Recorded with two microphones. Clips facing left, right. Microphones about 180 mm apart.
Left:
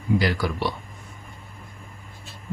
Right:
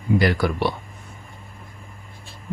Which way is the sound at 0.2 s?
60° right (ahead or behind).